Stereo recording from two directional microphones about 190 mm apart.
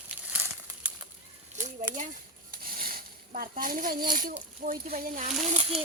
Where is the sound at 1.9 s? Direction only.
10° right (ahead or behind).